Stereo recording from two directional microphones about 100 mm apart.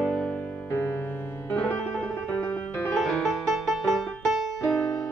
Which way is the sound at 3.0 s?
5° left (ahead or behind).